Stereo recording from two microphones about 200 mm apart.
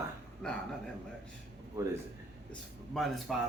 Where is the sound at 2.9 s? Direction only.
Centre (ahead or behind).